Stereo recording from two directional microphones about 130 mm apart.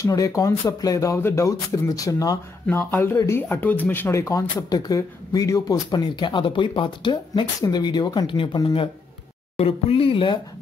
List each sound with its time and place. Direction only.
0.0 s speech: 25° left (ahead or behind); by 10.4 s 40° left (ahead or behind)